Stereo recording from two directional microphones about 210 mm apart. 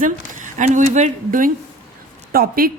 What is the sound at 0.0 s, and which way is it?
A woman's voice, 35° right (ahead or behind).